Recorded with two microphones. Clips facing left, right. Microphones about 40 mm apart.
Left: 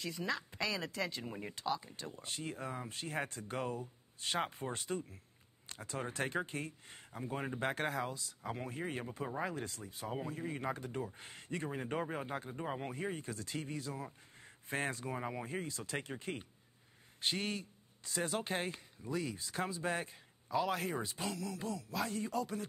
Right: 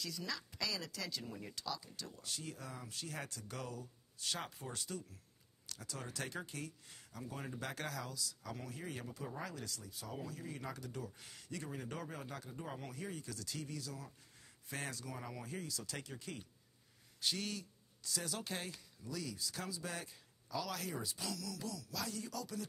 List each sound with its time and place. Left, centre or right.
0.0 s speech: left